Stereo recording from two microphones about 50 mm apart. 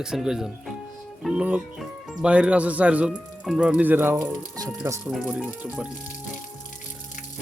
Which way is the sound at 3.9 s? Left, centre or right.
Right.